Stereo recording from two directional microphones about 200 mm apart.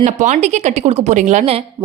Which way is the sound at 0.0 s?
35° right (ahead or behind).